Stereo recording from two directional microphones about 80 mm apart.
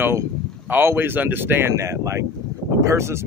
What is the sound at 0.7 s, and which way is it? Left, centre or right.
Speech, right.